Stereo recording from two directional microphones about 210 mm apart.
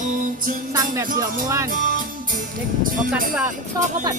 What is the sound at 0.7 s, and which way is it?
Speech, 15° right (ahead or behind).